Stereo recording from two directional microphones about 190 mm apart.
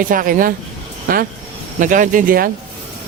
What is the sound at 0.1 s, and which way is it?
Speech, 45° right (ahead or behind).